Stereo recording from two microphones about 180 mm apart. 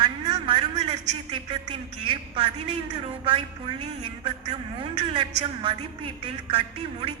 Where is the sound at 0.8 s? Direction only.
30° right (ahead or behind).